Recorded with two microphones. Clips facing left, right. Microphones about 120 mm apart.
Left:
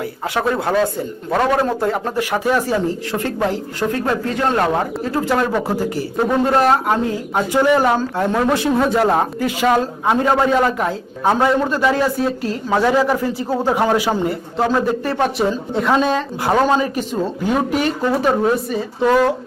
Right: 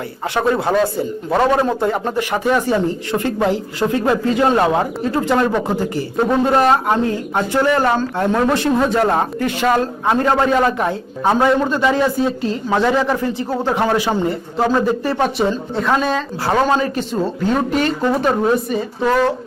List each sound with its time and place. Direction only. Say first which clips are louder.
0.3 s speech: right 2 dB; centre (ahead or behind)
15.7 s speech: left 1 dB; 15° left (ahead or behind)
16.5 s speech: even; 5° left (ahead or behind)